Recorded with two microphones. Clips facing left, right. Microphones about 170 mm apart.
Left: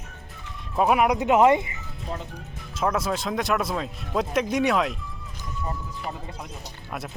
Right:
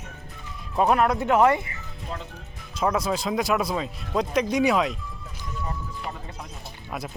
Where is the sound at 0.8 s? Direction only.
10° left (ahead or behind).